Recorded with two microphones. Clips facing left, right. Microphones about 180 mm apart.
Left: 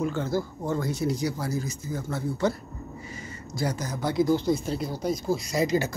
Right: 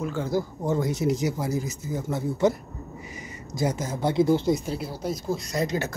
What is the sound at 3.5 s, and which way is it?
Speech, 20° right (ahead or behind).